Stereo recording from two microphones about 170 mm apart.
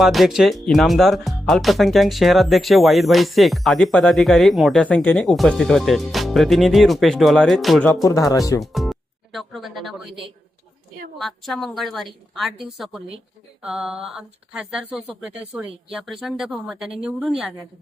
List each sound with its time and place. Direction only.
0.0 s speech: centre (ahead or behind)
8.0 s speech: 20° left (ahead or behind)
8.6 s speech: centre (ahead or behind)
10.1 s a man's voice: 30° right (ahead or behind)
11.2 s speech: centre (ahead or behind)